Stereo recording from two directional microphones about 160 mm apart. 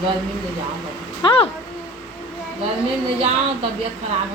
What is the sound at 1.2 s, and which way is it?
Speech, 35° left (ahead or behind).